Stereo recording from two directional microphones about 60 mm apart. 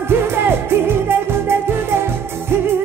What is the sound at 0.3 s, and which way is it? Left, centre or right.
Music, right.